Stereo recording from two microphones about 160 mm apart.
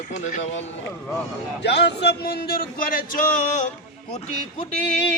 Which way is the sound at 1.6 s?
90° left.